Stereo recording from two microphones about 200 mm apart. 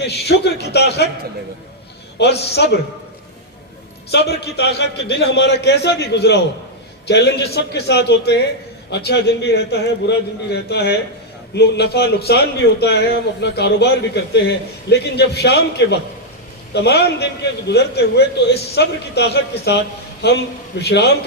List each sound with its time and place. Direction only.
0.0 s a man's voice: 55° left (ahead or behind)
2.1 s a man's voice: 55° left (ahead or behind)
4.1 s a man's voice: 55° left (ahead or behind)